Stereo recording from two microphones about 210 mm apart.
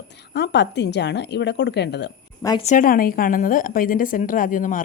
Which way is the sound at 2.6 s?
40° left (ahead or behind).